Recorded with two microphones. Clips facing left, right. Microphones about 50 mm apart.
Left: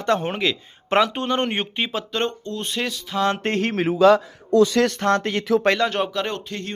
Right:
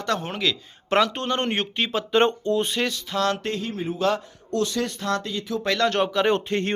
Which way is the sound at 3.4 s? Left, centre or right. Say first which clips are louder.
Left 5 dB; left.